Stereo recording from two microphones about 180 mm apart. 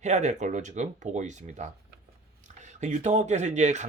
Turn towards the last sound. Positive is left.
turn(degrees=-40)  # may be behind; listen again after turning